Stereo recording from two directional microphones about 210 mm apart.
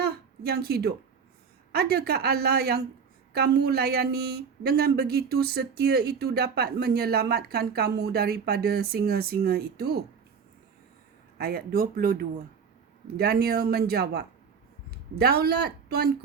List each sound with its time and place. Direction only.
0.0 s a sound: 50° right (ahead or behind)
1.7 s a woman's voice: 45° right (ahead or behind)
11.3 s a woman's voice: 45° right (ahead or behind)